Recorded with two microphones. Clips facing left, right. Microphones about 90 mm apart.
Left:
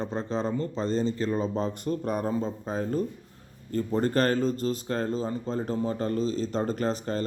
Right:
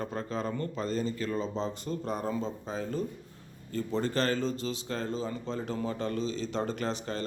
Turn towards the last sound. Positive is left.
turn(degrees=40)  # may be behind; listen again after turning